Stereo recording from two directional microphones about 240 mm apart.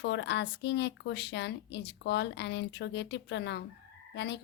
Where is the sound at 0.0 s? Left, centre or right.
Left.